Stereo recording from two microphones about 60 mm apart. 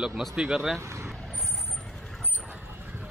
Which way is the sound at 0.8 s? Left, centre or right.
Right.